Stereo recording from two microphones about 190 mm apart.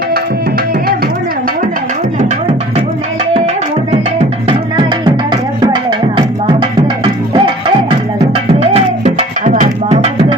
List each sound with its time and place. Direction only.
4.2 s music: 25° right (ahead or behind)